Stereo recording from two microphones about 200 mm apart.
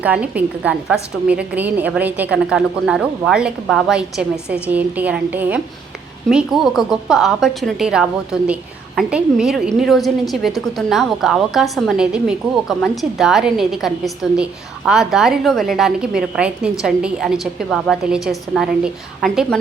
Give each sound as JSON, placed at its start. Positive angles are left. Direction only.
{"t": 0.0, "sound": "a woman's voice", "side_deg": -5}